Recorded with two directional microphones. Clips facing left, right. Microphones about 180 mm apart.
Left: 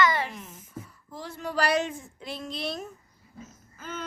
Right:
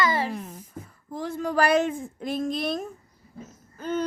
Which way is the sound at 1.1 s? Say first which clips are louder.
Right 6 dB; 50° right (ahead or behind).